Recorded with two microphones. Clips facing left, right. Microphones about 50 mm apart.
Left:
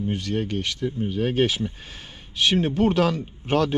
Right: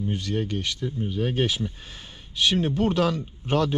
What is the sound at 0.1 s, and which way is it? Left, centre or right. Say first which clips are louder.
Speech: left 1 dB; left.